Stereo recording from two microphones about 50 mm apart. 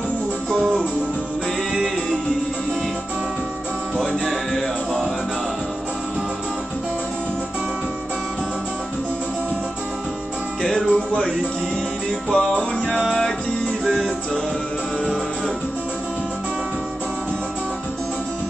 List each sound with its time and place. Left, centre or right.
3.9 s music: centre
4.2 s music: centre
10.6 s music: centre